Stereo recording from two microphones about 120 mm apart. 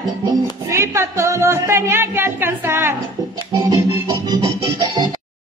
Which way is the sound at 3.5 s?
35° right (ahead or behind).